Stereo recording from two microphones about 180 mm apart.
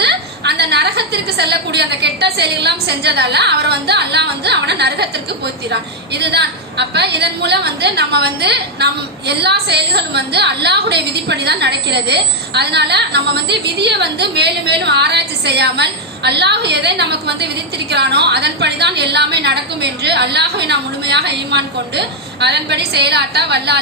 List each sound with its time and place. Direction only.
0.0 s a woman's voice: 65° right (ahead or behind)